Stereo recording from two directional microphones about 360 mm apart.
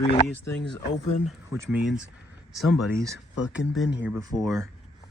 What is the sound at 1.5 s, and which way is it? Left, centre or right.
Speech, centre.